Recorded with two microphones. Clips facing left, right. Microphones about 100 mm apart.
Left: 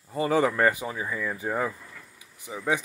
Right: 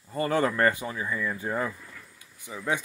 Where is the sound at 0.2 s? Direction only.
10° left (ahead or behind).